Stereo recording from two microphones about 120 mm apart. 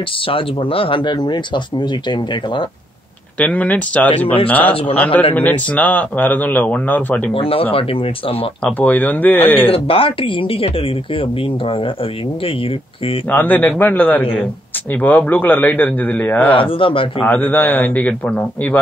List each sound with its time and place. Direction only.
0.3 s speech: 50° left (ahead or behind)
3.3 s speech: 10° left (ahead or behind)
7.3 s speech: 50° left (ahead or behind)
8.6 s speech: 15° left (ahead or behind)
9.6 s speech: 50° left (ahead or behind)
13.3 s speech: 15° left (ahead or behind)
16.5 s speech: 45° left (ahead or behind)
17.3 s speech: 15° left (ahead or behind)